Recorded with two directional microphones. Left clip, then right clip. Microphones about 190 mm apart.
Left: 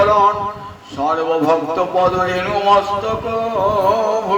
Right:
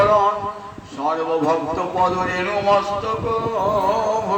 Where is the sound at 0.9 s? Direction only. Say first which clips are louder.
Left 4 dB; 50° left (ahead or behind).